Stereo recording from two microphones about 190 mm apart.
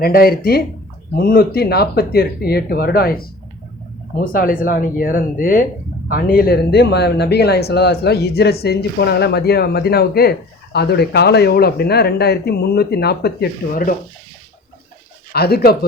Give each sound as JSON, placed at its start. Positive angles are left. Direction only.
{"t": 0.0, "sound": "speech", "side_deg": 55}
{"t": 15.3, "sound": "speech", "side_deg": 55}